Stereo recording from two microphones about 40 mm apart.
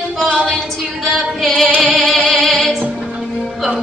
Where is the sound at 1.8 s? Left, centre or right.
Centre.